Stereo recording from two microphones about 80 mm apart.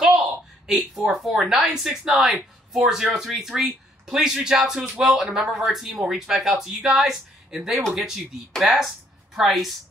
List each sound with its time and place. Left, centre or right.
0.0 s speech: centre